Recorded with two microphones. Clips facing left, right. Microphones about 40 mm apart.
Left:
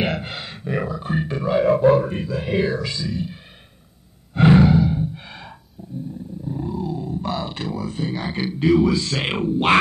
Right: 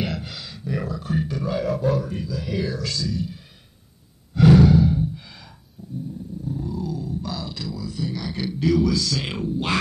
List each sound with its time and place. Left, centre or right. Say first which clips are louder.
0.0 s grunt: left 5 dB; left
2.8 s speech: left 1 dB; left
4.3 s a sound: even; left
4.8 s music: even; centre
5.1 s gasp: left 4 dB; left
5.8 s dog: left 1 dB; left
6.4 s speech: left 3 dB; left